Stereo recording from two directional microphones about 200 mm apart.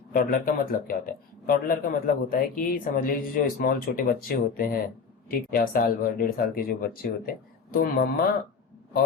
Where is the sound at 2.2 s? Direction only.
45° left (ahead or behind).